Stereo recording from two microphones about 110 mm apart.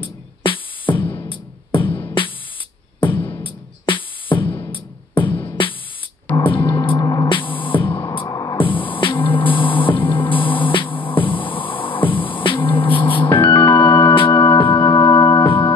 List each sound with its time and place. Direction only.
0.0 s music: 50° left (ahead or behind)
3.4 s music: 50° left (ahead or behind)
6.4 s music: 50° left (ahead or behind)
7.0 s hum: 35° left (ahead or behind)
7.2 s music: 50° left (ahead or behind)
8.3 s music: 35° left (ahead or behind)
8.5 s music: 50° left (ahead or behind)
14.1 s organ: 50° left (ahead or behind)